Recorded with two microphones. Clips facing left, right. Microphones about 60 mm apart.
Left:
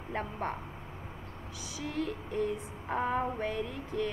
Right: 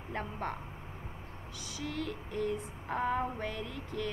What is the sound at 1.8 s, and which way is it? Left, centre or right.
Female singing, centre.